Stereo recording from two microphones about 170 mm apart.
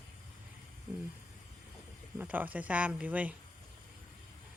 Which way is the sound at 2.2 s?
10° right (ahead or behind).